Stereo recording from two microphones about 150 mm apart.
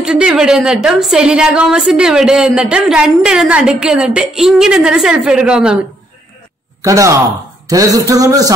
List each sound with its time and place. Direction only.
0.0 s a woman's voice: 5° right (ahead or behind)
6.8 s a man's voice: 20° right (ahead or behind)